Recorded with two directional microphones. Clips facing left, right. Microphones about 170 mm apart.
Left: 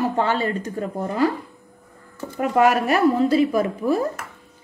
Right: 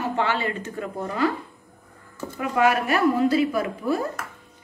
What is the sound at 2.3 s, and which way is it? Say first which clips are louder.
A woman's voice: left 4 dB; 45° left (ahead or behind).